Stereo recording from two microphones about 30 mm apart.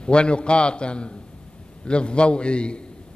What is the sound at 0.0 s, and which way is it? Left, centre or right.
A man's voice, left.